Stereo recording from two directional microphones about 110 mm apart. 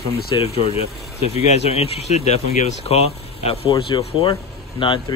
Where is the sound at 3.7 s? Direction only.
45° left (ahead or behind).